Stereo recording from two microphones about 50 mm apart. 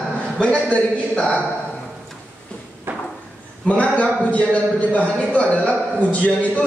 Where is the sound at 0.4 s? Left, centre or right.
Left.